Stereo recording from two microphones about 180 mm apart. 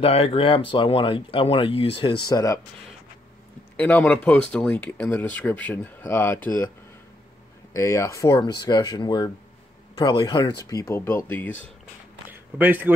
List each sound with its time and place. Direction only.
0.0 s speech: 30° left (ahead or behind)
2.2 s speech: 20° left (ahead or behind)
3.7 s speech: 10° left (ahead or behind)
7.7 s speech: 15° left (ahead or behind)
12.3 s speech: 10° right (ahead or behind)